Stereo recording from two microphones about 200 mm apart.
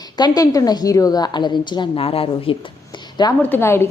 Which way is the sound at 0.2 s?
20° left (ahead or behind).